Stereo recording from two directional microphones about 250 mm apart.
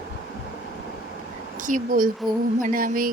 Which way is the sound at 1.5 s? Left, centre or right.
Right.